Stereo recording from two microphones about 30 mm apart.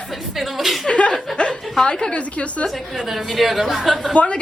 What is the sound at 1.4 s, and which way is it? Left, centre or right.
Speech, left.